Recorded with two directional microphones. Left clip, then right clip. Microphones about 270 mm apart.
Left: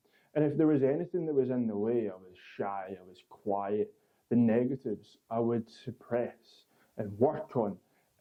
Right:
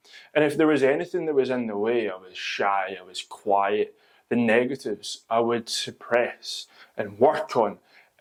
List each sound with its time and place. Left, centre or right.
0.1 s speech: centre
3.2 s speech: right
3.5 s speech: centre